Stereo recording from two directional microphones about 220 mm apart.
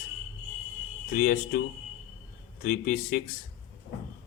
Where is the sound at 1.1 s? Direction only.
40° left (ahead or behind).